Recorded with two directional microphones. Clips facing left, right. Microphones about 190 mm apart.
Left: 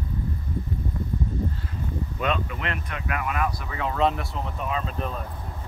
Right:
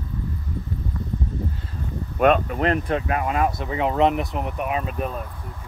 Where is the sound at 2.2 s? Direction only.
50° right (ahead or behind); by 5.0 s 15° right (ahead or behind).